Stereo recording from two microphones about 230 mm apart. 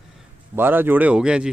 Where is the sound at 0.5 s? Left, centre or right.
Centre.